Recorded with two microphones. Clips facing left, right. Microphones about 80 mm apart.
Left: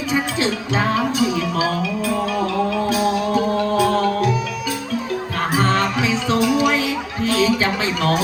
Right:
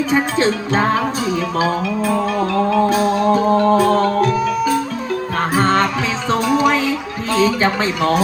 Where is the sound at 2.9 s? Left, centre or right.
Right.